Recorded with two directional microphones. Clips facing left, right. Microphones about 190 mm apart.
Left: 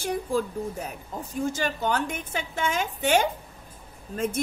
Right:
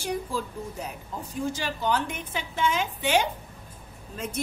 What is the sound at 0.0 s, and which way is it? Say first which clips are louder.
Speech: left 3 dB; 50° left (ahead or behind).